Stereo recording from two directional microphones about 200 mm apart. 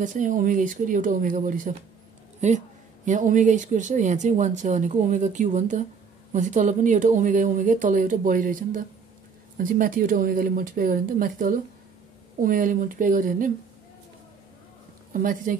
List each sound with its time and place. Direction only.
0.0 s speech: 40° right (ahead or behind)
15.1 s speech: 40° right (ahead or behind)